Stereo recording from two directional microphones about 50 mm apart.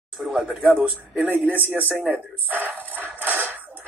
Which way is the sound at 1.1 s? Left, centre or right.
Right.